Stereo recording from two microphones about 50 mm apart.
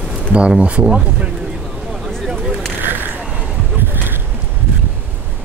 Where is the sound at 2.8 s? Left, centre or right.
Right.